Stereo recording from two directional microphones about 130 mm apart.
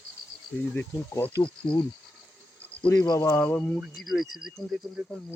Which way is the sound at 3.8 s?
Centre (ahead or behind).